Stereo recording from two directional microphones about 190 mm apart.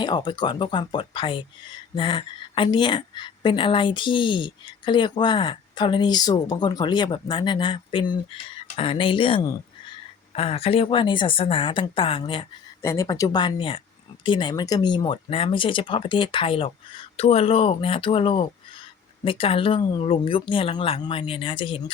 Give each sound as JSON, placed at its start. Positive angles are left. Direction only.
{"t": 0.0, "sound": "speech", "side_deg": 20}